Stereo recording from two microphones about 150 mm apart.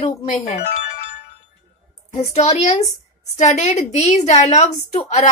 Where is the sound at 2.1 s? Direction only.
45° left (ahead or behind).